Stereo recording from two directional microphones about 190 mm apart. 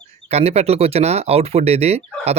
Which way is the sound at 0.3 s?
35° right (ahead or behind).